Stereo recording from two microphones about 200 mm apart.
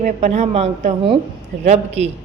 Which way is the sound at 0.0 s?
35° right (ahead or behind).